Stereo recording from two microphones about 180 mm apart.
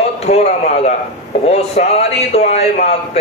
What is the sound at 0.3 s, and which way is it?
Speech, 40° left (ahead or behind).